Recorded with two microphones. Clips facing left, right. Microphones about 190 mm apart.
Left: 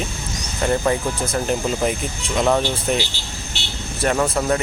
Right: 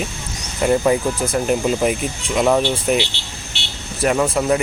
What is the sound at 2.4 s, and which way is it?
Speech, 5° right (ahead or behind).